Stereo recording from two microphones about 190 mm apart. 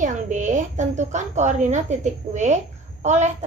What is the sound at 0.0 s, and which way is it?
A woman's voice, 40° right (ahead or behind).